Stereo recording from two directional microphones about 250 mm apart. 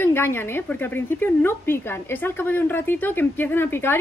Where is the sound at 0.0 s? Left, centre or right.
Centre.